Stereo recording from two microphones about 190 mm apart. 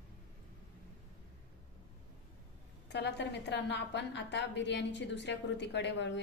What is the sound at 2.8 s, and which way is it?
A woman's voice, 65° left (ahead or behind).